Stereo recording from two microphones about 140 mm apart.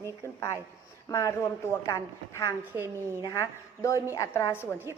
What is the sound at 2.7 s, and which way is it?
Speech, 15° right (ahead or behind).